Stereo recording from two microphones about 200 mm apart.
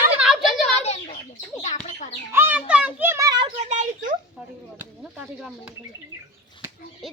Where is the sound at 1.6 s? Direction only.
35° left (ahead or behind).